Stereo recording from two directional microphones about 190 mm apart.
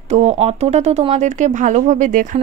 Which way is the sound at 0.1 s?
35° right (ahead or behind).